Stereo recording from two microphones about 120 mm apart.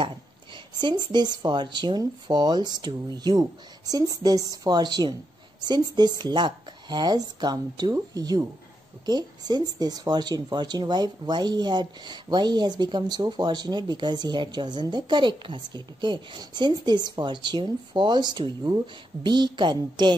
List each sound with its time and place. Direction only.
0.7 s speech: 40° right (ahead or behind)